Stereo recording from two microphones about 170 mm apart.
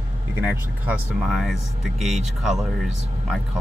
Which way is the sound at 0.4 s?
10° right (ahead or behind).